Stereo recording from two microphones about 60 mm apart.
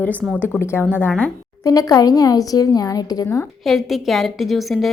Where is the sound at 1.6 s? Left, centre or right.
Left.